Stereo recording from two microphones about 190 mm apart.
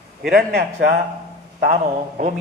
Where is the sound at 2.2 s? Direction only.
45° right (ahead or behind).